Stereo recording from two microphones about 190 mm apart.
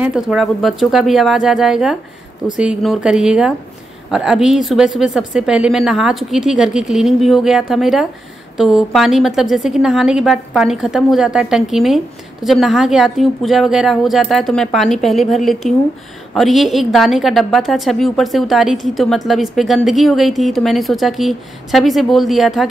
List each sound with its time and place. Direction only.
0.0 s a woman's voice: 5° right (ahead or behind)